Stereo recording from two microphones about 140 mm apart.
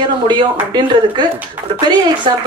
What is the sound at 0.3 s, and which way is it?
Speech, 30° right (ahead or behind).